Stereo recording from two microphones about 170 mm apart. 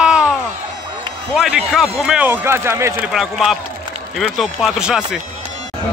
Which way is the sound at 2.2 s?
15° right (ahead or behind).